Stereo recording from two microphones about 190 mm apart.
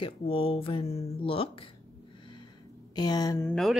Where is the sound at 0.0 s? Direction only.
30° left (ahead or behind).